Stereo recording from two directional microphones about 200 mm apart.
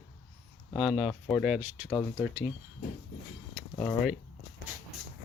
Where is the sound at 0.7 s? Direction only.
5° right (ahead or behind).